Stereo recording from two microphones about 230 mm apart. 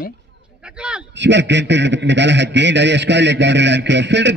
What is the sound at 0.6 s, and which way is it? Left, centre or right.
Speech, centre.